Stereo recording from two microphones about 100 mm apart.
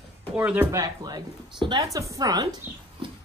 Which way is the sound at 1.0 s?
45° right (ahead or behind).